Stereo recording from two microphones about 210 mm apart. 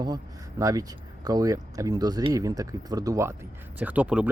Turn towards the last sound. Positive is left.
turn(degrees=-5)  # may be behind; listen again after turning